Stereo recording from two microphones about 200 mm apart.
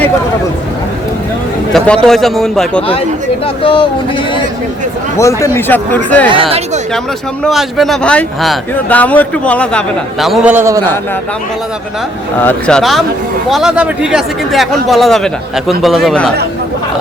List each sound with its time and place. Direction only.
1.7 s speech: centre (ahead or behind)
3.4 s speech: 25° left (ahead or behind)
5.1 s speech: 15° left (ahead or behind)
6.3 s speech: 25° right (ahead or behind)
7.4 s speech: centre (ahead or behind)
12.4 s speech: 5° left (ahead or behind)